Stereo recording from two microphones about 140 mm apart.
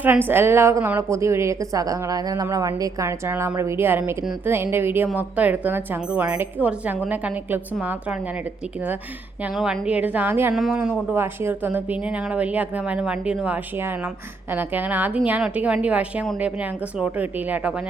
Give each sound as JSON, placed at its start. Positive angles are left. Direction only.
{"t": 0.0, "sound": "a woman's voice", "side_deg": -15}
{"t": 9.4, "sound": "speech", "side_deg": -5}
{"t": 10.5, "sound": "speech", "side_deg": 0}
{"t": 11.1, "sound": "speech", "side_deg": -15}